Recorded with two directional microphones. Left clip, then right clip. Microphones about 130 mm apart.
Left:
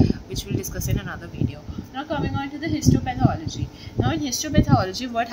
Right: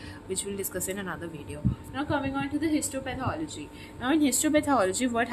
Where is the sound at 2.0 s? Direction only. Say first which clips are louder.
Left 3 dB; 25° right (ahead or behind).